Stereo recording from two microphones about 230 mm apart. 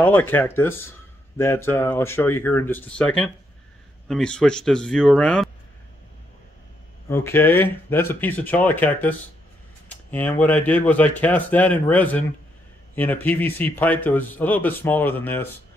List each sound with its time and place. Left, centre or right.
0.0 s a man's voice: centre
7.1 s a man's voice: centre